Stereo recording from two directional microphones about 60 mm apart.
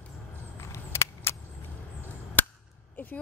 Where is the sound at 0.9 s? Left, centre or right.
Left.